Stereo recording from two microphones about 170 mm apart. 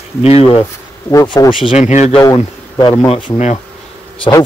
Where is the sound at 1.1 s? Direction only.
20° left (ahead or behind).